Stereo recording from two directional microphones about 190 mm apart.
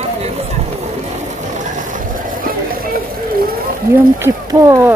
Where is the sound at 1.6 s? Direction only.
40° right (ahead or behind).